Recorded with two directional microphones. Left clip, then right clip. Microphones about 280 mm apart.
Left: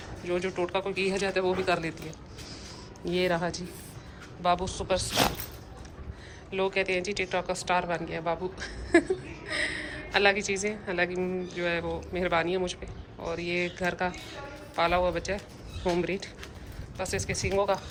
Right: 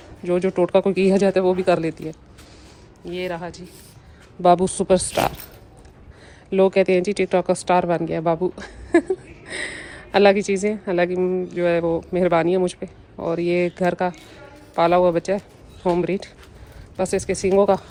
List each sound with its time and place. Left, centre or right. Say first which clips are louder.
0.3 s speech: right 10 dB; centre
3.0 s speech: even; centre
4.4 s a woman's voice: right 11 dB; right
6.5 s speech: right 11 dB; centre